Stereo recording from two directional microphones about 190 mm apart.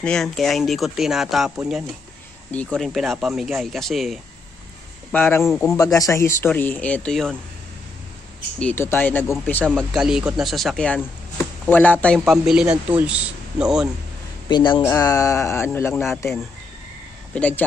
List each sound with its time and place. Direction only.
0.0 s speech: 5° left (ahead or behind)
2.5 s speech: 5° left (ahead or behind)
5.1 s speech: 10° left (ahead or behind)
5.5 s speech: centre (ahead or behind)
5.8 s speech: 15° left (ahead or behind)
8.5 s speech: 10° left (ahead or behind)
9.8 s speech: centre (ahead or behind)
14.5 s speech: 25° left (ahead or behind)
17.3 s speech: 5° left (ahead or behind)